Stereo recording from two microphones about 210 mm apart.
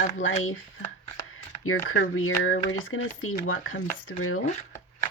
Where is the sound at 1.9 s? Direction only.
65° left (ahead or behind).